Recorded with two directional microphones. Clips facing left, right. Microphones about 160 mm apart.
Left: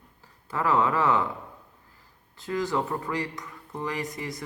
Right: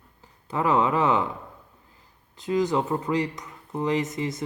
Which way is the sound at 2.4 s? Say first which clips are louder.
Right 4 dB; 20° right (ahead or behind).